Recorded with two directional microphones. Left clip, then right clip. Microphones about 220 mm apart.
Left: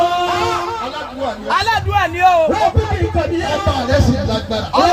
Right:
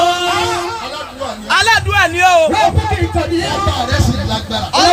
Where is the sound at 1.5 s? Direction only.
35° right (ahead or behind).